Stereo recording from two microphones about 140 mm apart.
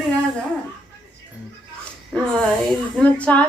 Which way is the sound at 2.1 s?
5° left (ahead or behind).